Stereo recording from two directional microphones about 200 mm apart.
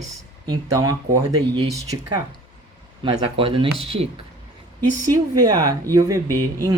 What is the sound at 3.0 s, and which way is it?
Speech, 25° right (ahead or behind).